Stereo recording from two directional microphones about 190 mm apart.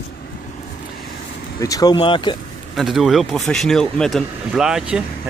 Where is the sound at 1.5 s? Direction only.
20° left (ahead or behind).